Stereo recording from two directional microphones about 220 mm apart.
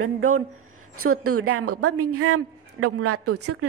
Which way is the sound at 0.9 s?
85° right.